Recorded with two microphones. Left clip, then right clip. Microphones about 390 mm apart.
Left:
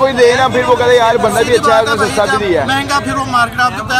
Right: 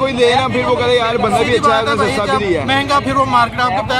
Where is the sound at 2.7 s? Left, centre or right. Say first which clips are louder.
Even; centre.